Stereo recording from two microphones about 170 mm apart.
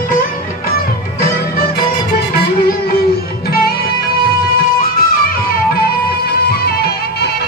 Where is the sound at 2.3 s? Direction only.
65° left (ahead or behind).